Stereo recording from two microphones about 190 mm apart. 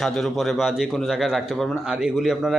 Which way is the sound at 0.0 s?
Centre (ahead or behind).